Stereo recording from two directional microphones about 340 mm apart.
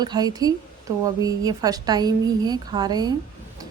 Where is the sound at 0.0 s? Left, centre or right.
Centre.